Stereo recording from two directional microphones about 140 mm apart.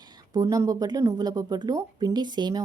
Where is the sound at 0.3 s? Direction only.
25° right (ahead or behind).